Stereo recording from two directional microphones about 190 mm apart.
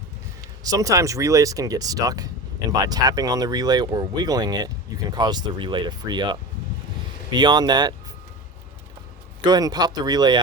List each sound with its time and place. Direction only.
0.6 s speech: 20° right (ahead or behind)
9.5 s speech: 20° right (ahead or behind)